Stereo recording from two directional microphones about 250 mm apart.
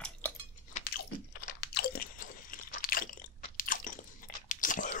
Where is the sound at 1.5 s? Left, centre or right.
Left.